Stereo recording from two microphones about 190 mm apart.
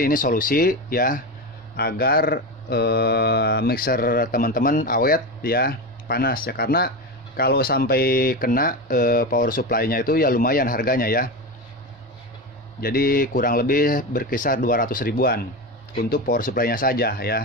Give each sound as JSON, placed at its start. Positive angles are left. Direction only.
{"t": 0.0, "sound": "speech", "side_deg": 45}
{"t": 12.8, "sound": "speech", "side_deg": 50}